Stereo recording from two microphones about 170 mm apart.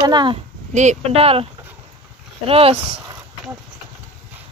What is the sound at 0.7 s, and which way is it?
Speech, 45° right (ahead or behind).